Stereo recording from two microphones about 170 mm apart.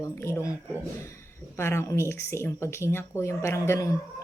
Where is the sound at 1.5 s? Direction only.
15° left (ahead or behind).